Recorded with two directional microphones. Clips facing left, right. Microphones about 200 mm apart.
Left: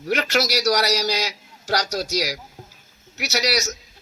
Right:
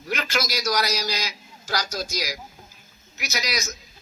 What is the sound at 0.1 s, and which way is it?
A man's voice, 70° left (ahead or behind).